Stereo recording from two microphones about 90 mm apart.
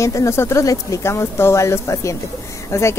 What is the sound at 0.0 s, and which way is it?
A woman's voice, 35° left (ahead or behind).